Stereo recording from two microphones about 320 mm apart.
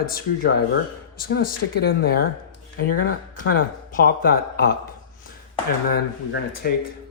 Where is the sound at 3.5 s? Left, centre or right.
Left.